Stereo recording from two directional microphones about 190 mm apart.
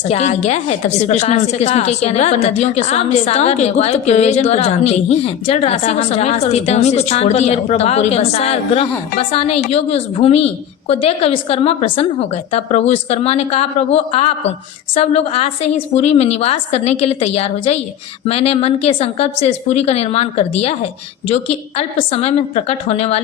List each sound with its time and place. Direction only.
0.1 s a woman's voice: 35° left (ahead or behind)